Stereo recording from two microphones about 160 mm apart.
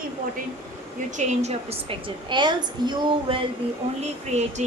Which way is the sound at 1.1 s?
45° right (ahead or behind).